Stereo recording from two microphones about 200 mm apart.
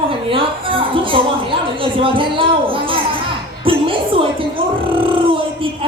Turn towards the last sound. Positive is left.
turn(degrees=-25)  # may be behind; listen again after turning